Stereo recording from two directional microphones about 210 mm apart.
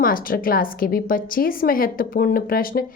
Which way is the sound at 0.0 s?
40° left (ahead or behind).